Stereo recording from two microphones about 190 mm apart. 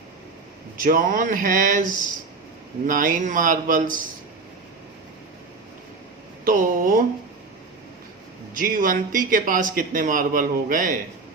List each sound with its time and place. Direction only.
0.8 s speech: 45° right (ahead or behind)
6.4 s speech: 45° right (ahead or behind)
8.5 s speech: 45° right (ahead or behind)